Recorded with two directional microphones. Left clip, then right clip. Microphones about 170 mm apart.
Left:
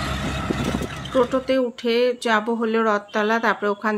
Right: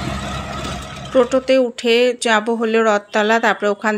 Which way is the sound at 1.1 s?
20° right (ahead or behind).